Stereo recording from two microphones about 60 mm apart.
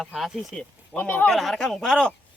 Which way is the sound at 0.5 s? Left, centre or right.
Centre.